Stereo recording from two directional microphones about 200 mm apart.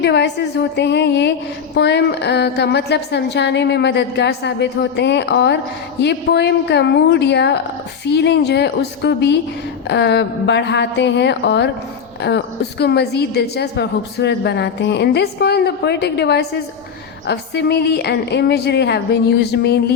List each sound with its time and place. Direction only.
0.0 s a woman's voice: 60° left (ahead or behind)